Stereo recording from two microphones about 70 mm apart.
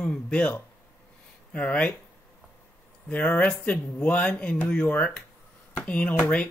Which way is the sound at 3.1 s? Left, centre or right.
Left.